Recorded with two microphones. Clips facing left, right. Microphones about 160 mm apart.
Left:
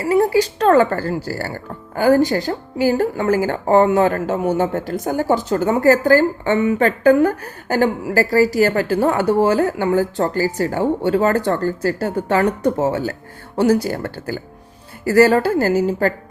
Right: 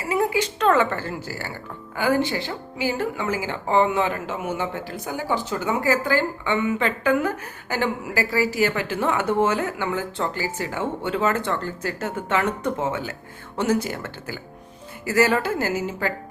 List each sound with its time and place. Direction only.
0.0 s a woman's voice: 35° left (ahead or behind)